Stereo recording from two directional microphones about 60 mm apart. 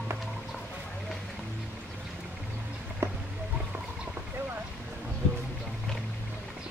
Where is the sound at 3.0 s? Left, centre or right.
Right.